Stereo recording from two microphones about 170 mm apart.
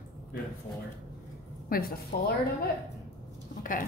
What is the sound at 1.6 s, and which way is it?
Speech, 60° left (ahead or behind).